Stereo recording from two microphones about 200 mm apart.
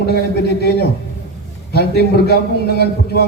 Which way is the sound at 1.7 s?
55° left (ahead or behind).